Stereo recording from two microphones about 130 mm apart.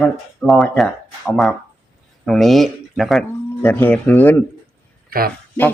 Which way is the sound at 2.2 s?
5° left (ahead or behind).